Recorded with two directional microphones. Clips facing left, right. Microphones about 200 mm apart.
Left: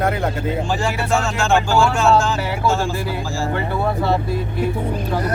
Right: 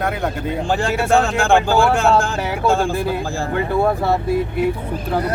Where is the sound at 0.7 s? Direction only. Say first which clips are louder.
Right 7 dB; 55° right (ahead or behind).